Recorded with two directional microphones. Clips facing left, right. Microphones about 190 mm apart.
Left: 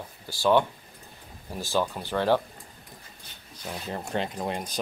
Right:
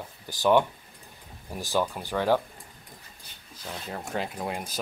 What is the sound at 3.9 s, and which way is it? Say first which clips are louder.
Speech: left 2 dB; 5° right (ahead or behind).